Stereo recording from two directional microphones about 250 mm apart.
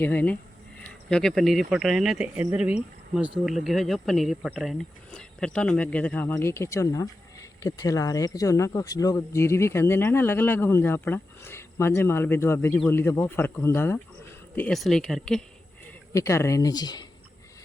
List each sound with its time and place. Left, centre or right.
0.0 s speech: centre